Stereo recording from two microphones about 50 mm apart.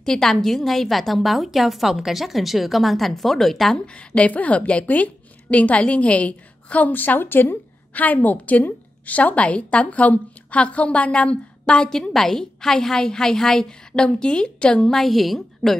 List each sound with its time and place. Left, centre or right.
0.0 s a woman's voice: centre
3.7 s a woman's voice: left
6.9 s a woman's voice: left; by 15.0 s centre
15.0 s a woman's voice: centre